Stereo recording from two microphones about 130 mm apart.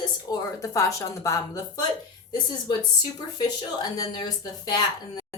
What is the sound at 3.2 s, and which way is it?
Speech, 35° left (ahead or behind).